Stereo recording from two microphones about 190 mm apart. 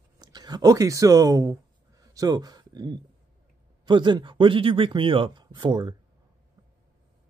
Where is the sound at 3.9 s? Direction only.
25° right (ahead or behind).